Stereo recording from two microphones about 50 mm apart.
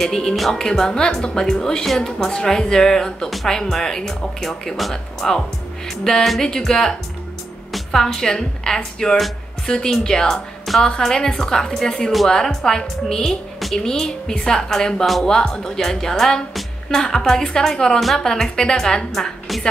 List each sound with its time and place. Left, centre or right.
0.0 s a woman's voice: centre